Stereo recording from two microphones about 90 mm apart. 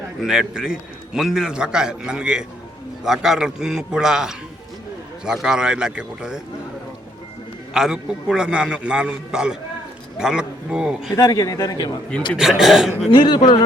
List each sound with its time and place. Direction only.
0.2 s a man's voice: 5° right (ahead or behind)
7.7 s a man's voice: 5° right (ahead or behind)
11.2 s a man's voice: 40° left (ahead or behind)
12.4 s a man's voice: 5° right (ahead or behind)
13.1 s speech: 60° left (ahead or behind)